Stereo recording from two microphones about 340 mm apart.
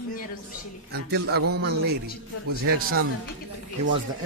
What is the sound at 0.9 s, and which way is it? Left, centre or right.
Speech, right.